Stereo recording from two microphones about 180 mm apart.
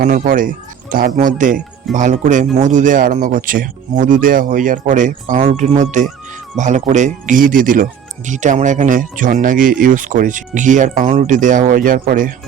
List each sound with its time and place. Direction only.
0.0 s speech: 50° right (ahead or behind)